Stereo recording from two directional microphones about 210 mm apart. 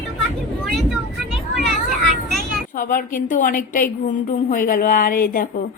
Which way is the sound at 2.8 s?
40° left (ahead or behind).